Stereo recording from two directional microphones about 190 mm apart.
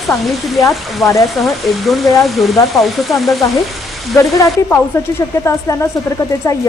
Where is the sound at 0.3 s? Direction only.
Centre (ahead or behind).